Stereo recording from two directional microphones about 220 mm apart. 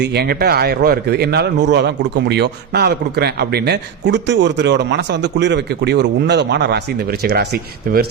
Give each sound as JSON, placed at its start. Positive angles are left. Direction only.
{"t": 0.0, "sound": "speech", "side_deg": -50}